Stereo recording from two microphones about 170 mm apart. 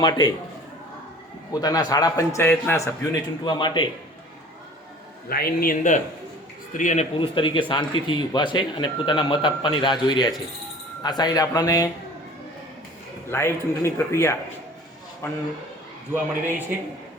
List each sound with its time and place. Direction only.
0.0 s speech: 25° left (ahead or behind)
1.6 s speech: 20° left (ahead or behind)
5.3 s a man's voice: 60° left (ahead or behind); by 7.1 s 45° left (ahead or behind)
7.2 s speech: 30° left (ahead or behind)
13.2 s speech: 15° left (ahead or behind)